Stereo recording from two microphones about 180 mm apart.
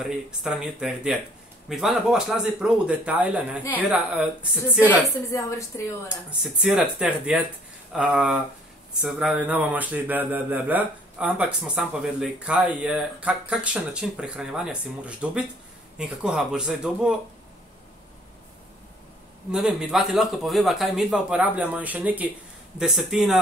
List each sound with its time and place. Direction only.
0.0 s a woman's voice: 5° right (ahead or behind)
5.3 s a woman's voice: 15° left (ahead or behind)
6.0 s a woman's voice: 5° right (ahead or behind)
19.5 s speech: centre (ahead or behind)